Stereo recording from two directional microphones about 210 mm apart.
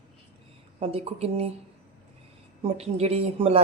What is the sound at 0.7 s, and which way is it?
Speech, 30° right (ahead or behind).